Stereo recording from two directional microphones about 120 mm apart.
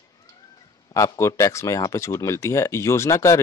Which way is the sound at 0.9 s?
25° left (ahead or behind).